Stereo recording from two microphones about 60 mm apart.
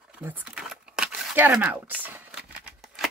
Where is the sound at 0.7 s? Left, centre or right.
Centre.